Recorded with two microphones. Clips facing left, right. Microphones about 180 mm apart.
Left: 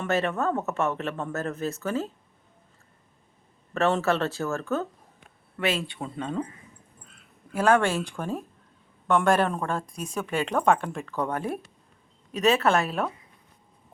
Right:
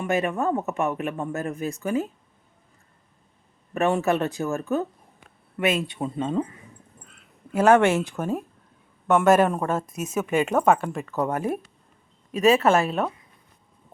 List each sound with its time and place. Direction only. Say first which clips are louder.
0.0 s speech: right 2 dB; 15° right (ahead or behind)
3.8 s speech: right 2 dB; 15° right (ahead or behind)
7.5 s speech: right 5 dB; 20° right (ahead or behind)
8.1 s speech: right 4 dB; 10° right (ahead or behind)